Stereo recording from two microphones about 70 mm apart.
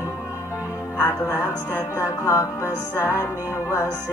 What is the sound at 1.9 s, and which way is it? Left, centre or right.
Music, left.